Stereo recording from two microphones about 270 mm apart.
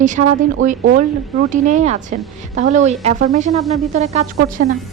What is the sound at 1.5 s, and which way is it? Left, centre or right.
A woman's voice, right.